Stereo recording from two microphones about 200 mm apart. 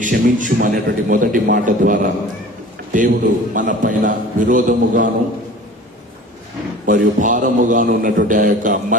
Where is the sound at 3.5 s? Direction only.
40° right (ahead or behind).